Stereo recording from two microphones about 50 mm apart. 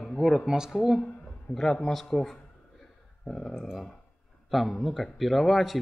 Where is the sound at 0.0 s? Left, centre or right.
Centre.